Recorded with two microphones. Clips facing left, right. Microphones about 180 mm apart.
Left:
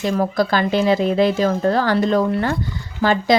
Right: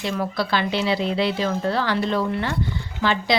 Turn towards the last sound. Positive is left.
turn(degrees=45)  # may be behind; listen again after turning